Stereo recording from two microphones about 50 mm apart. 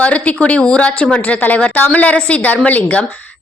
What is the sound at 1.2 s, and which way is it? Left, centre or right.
A woman's voice, left.